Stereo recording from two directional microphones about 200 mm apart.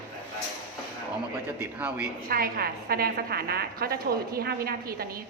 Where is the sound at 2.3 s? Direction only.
45° right (ahead or behind).